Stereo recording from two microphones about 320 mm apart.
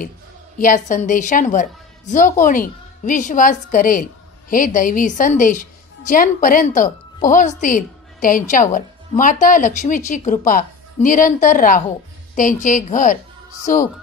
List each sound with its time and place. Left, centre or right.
0.6 s a woman's voice: left